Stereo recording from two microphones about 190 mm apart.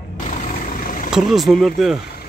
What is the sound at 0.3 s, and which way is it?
Vehicle, 40° left (ahead or behind).